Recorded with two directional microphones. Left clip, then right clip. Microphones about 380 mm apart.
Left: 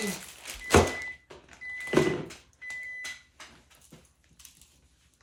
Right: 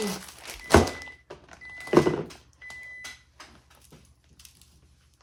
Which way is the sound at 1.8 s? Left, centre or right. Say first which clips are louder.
Right 4 dB; centre.